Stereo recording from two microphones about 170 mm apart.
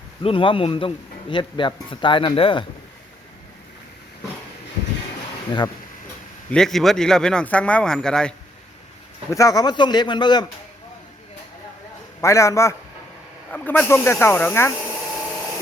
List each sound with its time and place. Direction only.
0.2 s a man's voice: 30° left (ahead or behind)
5.5 s a man's voice: 25° left (ahead or behind)
6.5 s speech: 5° left (ahead or behind)
9.3 s a man's voice: 20° left (ahead or behind)
12.2 s speech: 15° left (ahead or behind)